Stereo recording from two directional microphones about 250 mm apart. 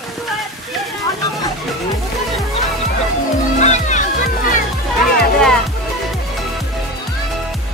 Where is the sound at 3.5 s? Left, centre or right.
Left.